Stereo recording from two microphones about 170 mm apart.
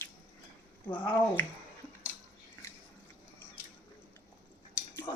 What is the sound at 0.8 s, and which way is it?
Speech, 10° left (ahead or behind).